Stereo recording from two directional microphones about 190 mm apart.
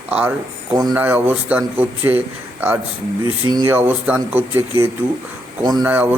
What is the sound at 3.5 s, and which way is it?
Speech, 10° right (ahead or behind).